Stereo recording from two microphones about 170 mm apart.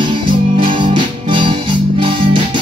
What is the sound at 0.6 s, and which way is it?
Music, 30° right (ahead or behind).